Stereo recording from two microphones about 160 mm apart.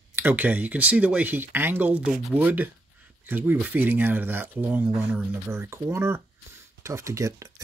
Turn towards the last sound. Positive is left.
turn(degrees=-20)  # may be behind; listen again after turning